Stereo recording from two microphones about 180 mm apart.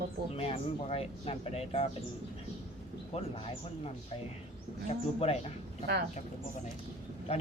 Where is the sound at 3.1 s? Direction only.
35° left (ahead or behind).